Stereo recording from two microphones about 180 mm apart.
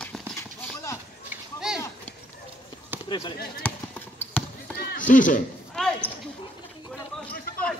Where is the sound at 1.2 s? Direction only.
5° right (ahead or behind).